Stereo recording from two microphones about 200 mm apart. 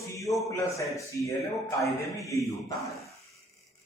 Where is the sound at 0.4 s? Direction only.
15° left (ahead or behind).